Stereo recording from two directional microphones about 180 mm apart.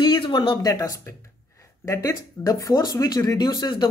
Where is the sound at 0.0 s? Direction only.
25° left (ahead or behind).